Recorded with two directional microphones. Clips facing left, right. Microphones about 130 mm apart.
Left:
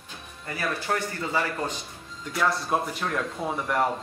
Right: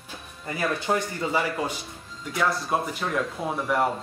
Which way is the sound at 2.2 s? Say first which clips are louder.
Even; centre (ahead or behind).